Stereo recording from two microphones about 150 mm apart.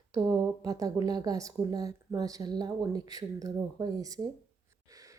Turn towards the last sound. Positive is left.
turn(degrees=-25)  # may be behind; listen again after turning